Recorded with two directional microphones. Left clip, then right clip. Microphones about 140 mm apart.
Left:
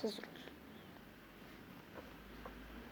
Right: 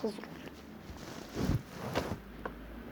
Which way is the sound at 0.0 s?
5° left (ahead or behind).